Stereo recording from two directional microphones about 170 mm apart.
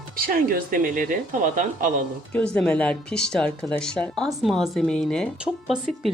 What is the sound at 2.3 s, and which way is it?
Speech, 5° left (ahead or behind).